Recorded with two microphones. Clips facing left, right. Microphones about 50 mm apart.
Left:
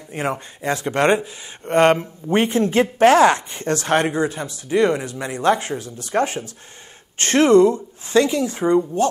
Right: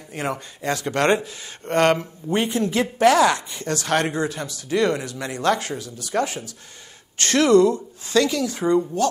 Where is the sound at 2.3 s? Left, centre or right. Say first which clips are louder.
Left 4 dB; left.